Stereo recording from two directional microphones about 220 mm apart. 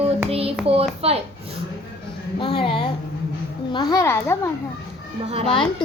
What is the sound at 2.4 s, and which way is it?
A woman's voice, 25° left (ahead or behind).